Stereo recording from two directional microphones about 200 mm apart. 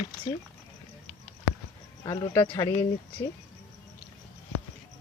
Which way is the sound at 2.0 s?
20° left (ahead or behind).